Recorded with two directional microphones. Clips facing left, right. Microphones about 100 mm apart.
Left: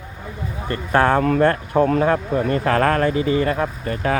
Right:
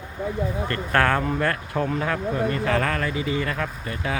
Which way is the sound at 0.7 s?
20° left (ahead or behind).